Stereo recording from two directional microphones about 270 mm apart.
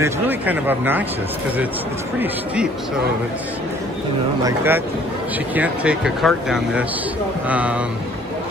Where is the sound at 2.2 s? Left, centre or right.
Centre.